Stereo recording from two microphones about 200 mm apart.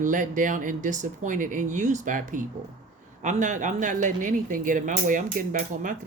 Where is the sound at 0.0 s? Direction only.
40° right (ahead or behind).